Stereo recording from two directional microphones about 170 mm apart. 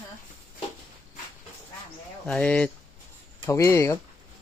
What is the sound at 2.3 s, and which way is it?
Speech, 5° left (ahead or behind).